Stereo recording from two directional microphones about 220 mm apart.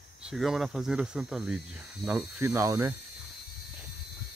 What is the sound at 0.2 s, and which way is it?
Speech, centre (ahead or behind).